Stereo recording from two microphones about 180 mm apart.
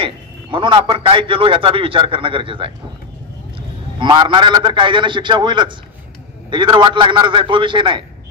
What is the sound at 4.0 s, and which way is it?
A man's voice, 25° right (ahead or behind).